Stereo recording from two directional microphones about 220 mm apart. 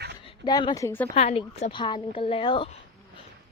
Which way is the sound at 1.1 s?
30° left (ahead or behind).